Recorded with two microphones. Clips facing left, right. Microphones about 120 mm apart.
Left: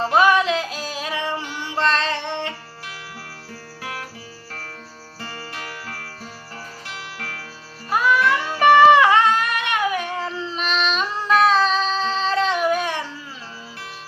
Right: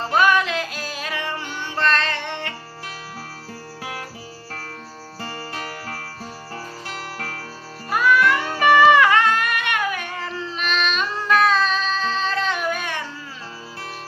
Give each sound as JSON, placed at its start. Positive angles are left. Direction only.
{"t": 0.0, "sound": "music", "side_deg": 30}
{"t": 5.2, "sound": "music", "side_deg": -30}
{"t": 7.9, "sound": "music", "side_deg": 25}